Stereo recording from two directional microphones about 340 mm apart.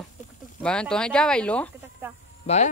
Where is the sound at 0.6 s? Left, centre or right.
Centre.